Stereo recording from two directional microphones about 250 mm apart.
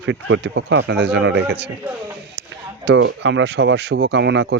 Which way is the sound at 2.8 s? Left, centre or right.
Right.